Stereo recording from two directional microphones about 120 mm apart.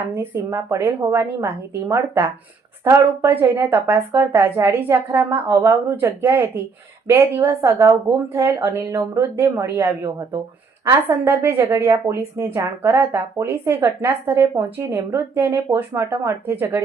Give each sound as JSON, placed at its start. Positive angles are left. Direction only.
{"t": 0.0, "sound": "a woman's voice", "side_deg": -20}